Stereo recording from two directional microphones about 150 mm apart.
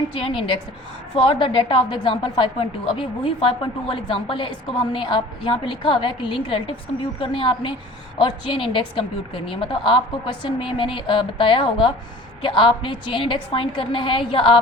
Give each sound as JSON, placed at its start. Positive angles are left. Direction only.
{"t": 0.1, "sound": "a woman's voice", "side_deg": 35}